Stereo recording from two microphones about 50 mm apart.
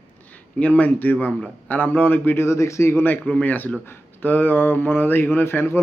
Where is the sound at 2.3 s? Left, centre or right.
Left.